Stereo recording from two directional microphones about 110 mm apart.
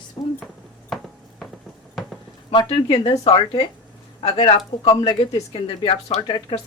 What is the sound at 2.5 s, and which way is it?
Speech, 50° left (ahead or behind).